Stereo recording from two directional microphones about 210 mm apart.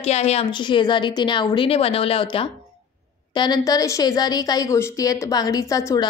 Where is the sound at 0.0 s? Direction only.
30° left (ahead or behind).